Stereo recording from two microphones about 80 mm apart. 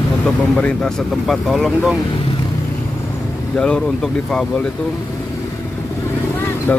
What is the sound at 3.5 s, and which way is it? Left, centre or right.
Speech, centre.